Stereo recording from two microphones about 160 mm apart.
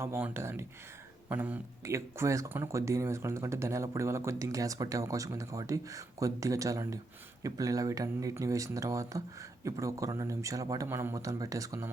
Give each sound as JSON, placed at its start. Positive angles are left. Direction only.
{"t": 0.0, "sound": "speech", "side_deg": -15}